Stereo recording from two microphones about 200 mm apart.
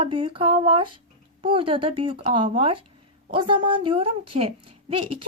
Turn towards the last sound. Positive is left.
turn(degrees=-25)  # may be behind; listen again after turning